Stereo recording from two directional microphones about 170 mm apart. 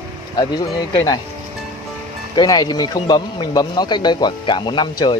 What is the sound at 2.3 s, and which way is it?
A man's voice, 25° left (ahead or behind).